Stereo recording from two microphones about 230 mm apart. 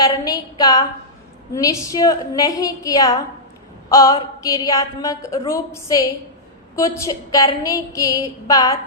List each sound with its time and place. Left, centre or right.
0.0 s a woman's voice: centre